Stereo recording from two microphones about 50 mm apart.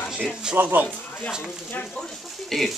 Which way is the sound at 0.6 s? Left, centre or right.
Right.